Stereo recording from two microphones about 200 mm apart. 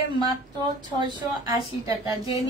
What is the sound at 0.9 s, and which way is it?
A woman's voice, 20° right (ahead or behind).